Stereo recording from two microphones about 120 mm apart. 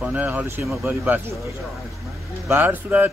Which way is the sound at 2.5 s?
15° right (ahead or behind).